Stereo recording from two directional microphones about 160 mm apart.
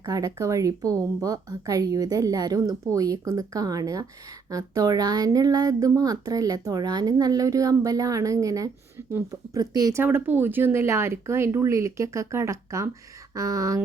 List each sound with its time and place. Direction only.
0.0 s speech: 25° right (ahead or behind)